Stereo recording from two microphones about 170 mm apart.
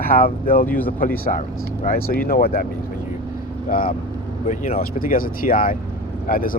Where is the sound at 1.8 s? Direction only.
60° left (ahead or behind).